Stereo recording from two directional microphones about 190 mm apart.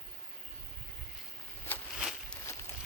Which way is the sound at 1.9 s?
Centre (ahead or behind).